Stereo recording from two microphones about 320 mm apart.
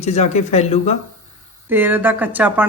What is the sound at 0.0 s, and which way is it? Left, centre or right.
Speech, left.